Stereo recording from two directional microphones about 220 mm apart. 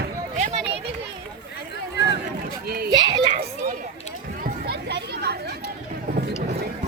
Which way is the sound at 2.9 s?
20° right (ahead or behind).